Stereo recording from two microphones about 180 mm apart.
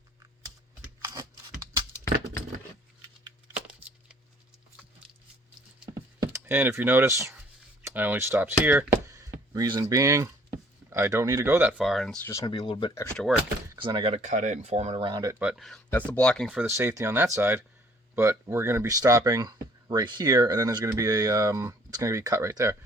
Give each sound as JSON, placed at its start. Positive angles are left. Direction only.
{"t": 1.0, "sound": "a sound", "side_deg": -20}
{"t": 3.7, "sound": "a sound", "side_deg": -5}
{"t": 6.2, "sound": "speech", "side_deg": -10}
{"t": 12.5, "sound": "speech", "side_deg": 25}
{"t": 13.1, "sound": "speech", "side_deg": 0}
{"t": 13.7, "sound": "speech", "side_deg": -25}
{"t": 15.0, "sound": "speech", "side_deg": -20}
{"t": 15.4, "sound": "speech", "side_deg": -5}
{"t": 16.6, "sound": "speech", "side_deg": -15}